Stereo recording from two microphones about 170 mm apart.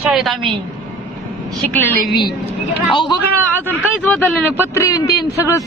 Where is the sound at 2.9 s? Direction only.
30° left (ahead or behind).